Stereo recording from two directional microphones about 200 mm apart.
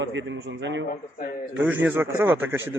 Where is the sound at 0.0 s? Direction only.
65° right (ahead or behind).